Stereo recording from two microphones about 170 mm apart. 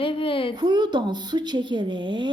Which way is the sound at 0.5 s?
25° right (ahead or behind).